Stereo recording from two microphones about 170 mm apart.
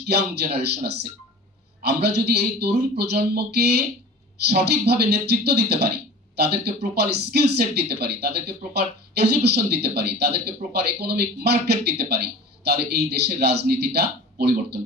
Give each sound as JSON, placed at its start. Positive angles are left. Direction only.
{"t": 0.1, "sound": "speech", "side_deg": -70}